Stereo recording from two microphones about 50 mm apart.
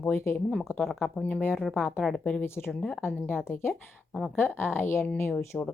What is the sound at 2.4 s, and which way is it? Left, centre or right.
Speech, left.